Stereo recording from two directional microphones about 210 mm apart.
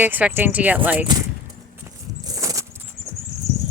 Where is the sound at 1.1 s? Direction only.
20° right (ahead or behind).